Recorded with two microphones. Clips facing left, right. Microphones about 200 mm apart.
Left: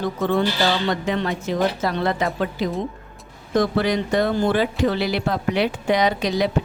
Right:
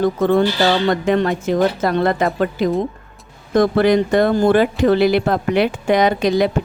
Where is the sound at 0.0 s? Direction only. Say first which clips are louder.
Right 6 dB; 50° right (ahead or behind).